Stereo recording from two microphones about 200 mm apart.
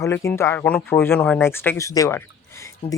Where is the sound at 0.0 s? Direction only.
15° left (ahead or behind).